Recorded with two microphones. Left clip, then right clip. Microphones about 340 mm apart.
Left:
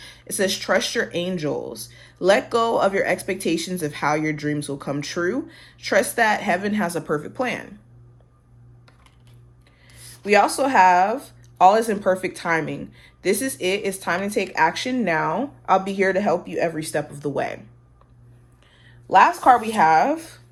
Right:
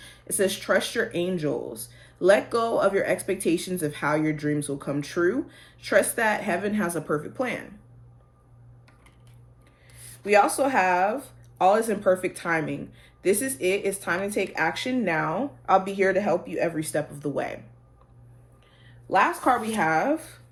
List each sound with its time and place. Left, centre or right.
0.0 s speech: left
10.2 s speech: left
19.0 s speech: left